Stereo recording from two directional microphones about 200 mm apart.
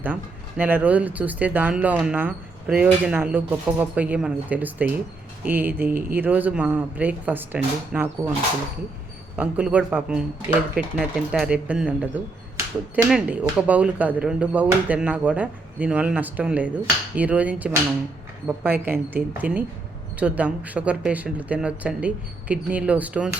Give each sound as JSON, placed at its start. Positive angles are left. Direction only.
{"t": 0.0, "sound": "speech", "side_deg": -10}
{"t": 9.3, "sound": "speech", "side_deg": -5}